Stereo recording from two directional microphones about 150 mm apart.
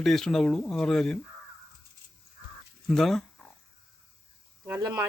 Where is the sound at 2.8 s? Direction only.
Centre (ahead or behind).